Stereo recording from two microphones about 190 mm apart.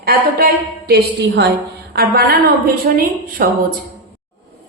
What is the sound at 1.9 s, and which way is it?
A woman's voice, 55° right (ahead or behind).